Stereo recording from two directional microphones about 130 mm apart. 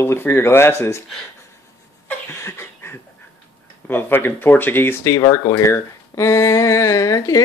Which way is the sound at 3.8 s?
15° left (ahead or behind).